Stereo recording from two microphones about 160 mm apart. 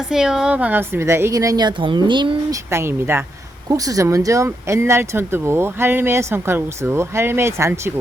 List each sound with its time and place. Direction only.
0.1 s a woman's voice: 5° right (ahead or behind); by 2.6 s 30° right (ahead or behind)
2.6 s speech: 15° right (ahead or behind)